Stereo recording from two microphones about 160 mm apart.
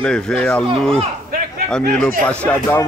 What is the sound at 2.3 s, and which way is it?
Speech, 10° left (ahead or behind).